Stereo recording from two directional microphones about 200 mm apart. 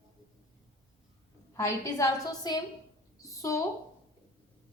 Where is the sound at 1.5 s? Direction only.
15° left (ahead or behind).